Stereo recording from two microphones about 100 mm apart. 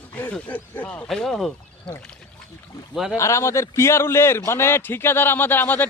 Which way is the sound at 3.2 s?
30° left (ahead or behind).